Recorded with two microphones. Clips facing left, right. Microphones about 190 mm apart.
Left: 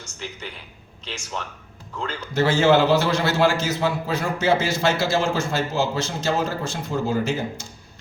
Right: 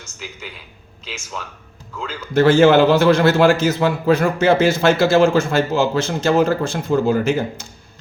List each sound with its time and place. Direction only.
2.3 s a man's voice: 55° right (ahead or behind)